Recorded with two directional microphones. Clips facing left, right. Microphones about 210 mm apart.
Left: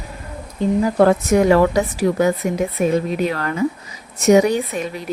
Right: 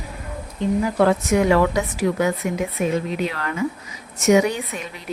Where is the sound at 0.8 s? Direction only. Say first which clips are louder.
Left 4 dB; 40° left (ahead or behind).